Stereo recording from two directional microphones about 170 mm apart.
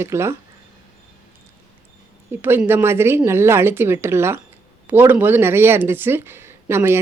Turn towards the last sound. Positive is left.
turn(degrees=-15)  # may be behind; listen again after turning